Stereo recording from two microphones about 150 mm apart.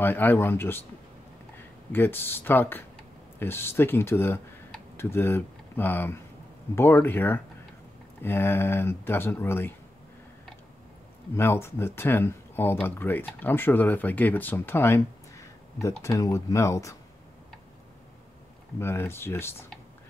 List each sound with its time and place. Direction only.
0.0 s speech: 15° left (ahead or behind)
1.9 s speech: 15° left (ahead or behind)
11.3 s speech: 15° left (ahead or behind)
18.8 s speech: 15° left (ahead or behind)